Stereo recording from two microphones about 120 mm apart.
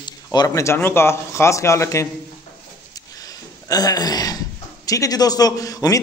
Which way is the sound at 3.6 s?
35° left (ahead or behind).